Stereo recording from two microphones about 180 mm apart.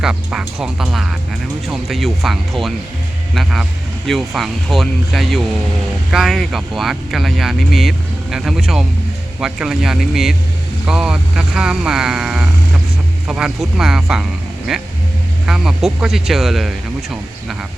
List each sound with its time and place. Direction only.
0.0 s speech: 5° right (ahead or behind)